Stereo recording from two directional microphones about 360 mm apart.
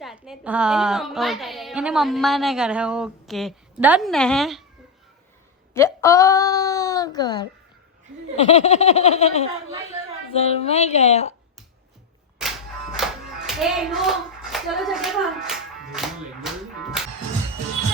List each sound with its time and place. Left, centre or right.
0.0 s a woman's voice: centre
5.7 s a woman's voice: centre
12.4 s music: centre
13.5 s hands: centre